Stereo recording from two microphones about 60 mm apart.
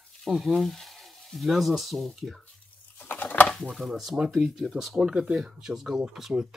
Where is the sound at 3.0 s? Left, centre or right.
Left.